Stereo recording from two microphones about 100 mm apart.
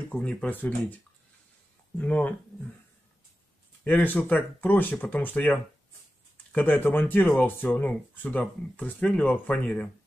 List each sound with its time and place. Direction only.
0.1 s speech: 10° left (ahead or behind)
2.0 s speech: 15° left (ahead or behind)
3.8 s speech: 20° left (ahead or behind)